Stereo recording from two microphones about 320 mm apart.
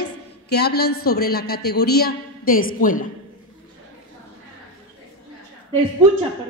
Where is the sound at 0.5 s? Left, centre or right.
Left.